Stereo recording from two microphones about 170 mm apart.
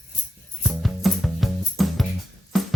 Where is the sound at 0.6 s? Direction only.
Centre (ahead or behind).